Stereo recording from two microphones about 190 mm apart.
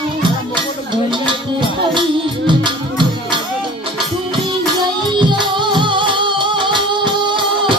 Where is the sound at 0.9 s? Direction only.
25° right (ahead or behind).